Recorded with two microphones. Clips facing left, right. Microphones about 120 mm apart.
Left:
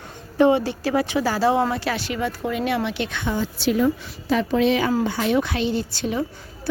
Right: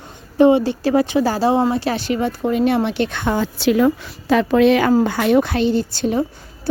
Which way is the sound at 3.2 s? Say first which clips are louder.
Right 4 dB; 80° right.